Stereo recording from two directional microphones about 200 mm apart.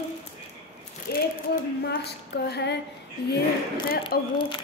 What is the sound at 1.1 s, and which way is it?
Speech, 50° left (ahead or behind).